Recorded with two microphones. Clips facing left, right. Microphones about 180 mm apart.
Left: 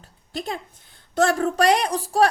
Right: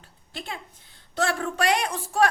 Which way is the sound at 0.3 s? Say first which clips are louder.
Left 7 dB; 40° left (ahead or behind).